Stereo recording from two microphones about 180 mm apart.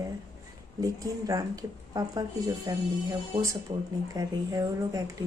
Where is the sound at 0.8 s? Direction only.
20° right (ahead or behind).